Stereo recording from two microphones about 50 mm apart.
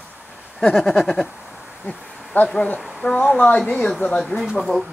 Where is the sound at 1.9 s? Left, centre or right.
Left.